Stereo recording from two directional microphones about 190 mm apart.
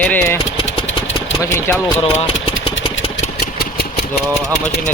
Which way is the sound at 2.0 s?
30° left (ahead or behind).